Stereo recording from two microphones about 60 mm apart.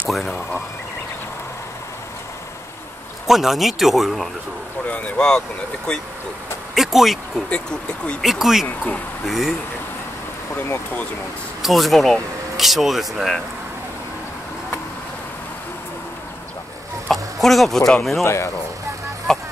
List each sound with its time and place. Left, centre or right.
0.1 s a sound: centre
3.3 s speech: centre
4.8 s speech: left
5.9 s speech: centre
6.7 s vehicle: centre
7.4 s speech: centre
8.2 s speech: centre
8.6 s speech: left
9.2 s speech: centre
11.6 s speech: centre
17.1 s chicken: centre
18.2 s speech: left
19.3 s a sound: centre